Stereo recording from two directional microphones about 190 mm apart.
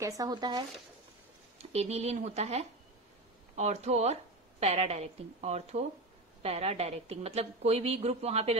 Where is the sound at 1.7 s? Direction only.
35° right (ahead or behind).